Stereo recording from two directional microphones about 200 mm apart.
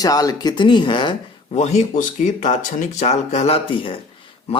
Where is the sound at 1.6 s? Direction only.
35° left (ahead or behind).